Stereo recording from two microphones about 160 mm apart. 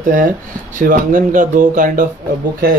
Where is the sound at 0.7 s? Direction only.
55° right (ahead or behind).